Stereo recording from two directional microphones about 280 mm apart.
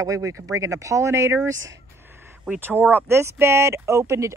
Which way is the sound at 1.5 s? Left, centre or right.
Right.